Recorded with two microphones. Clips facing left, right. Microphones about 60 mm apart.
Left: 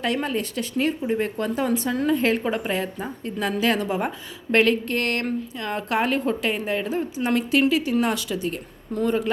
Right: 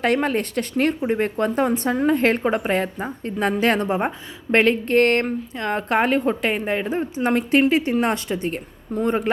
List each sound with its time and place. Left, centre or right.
0.0 s a woman's voice: right